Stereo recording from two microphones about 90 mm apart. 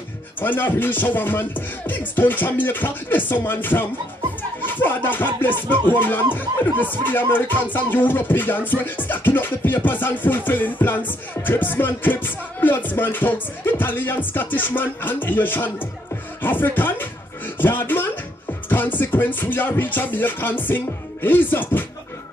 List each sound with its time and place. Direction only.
0.4 s music: 20° left (ahead or behind)
4.4 s speech: 20° left (ahead or behind)
6.3 s music: 20° left (ahead or behind)
17.6 s speech: 20° left (ahead or behind)
18.7 s music: 20° left (ahead or behind)